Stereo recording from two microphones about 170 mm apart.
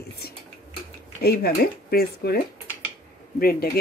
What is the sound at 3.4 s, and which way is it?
Speech, 65° left (ahead or behind).